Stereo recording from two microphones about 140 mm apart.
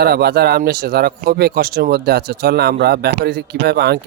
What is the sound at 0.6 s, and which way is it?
Speech, 90° right.